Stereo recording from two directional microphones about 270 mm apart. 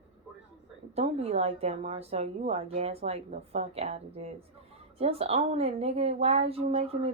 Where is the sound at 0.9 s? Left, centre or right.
Right.